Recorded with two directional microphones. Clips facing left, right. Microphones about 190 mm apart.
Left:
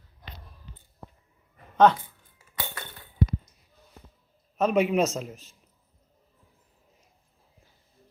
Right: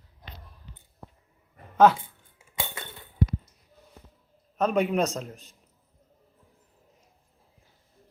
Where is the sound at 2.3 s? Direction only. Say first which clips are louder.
Right 1 dB; 20° right (ahead or behind).